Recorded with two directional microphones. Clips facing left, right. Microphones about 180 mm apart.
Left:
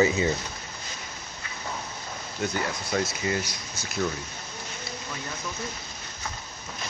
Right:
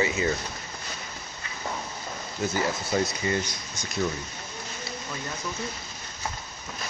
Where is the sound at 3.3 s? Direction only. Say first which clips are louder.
Right 1 dB; 5° left (ahead or behind).